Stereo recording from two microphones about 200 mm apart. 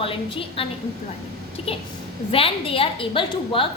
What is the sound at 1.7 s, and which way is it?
A woman's voice, 30° left (ahead or behind).